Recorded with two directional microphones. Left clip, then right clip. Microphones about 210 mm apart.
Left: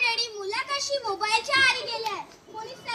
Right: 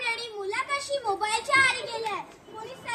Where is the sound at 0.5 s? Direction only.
20° left (ahead or behind).